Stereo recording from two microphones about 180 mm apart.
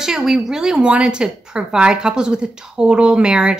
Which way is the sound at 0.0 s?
Centre (ahead or behind).